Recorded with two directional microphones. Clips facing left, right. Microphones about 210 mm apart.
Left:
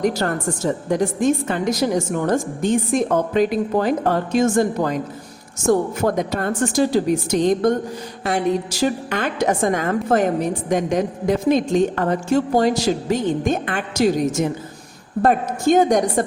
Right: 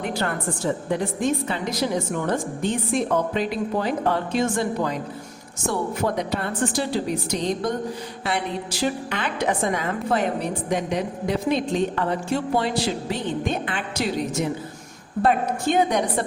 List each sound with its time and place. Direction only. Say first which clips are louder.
0.0 s a woman's voice: left 6 dB; 40° left (ahead or behind)